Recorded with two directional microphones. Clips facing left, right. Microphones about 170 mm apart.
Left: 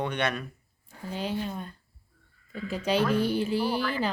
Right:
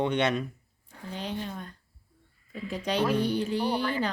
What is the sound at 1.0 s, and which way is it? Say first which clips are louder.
Speech: left 3 dB; 5° left (ahead or behind).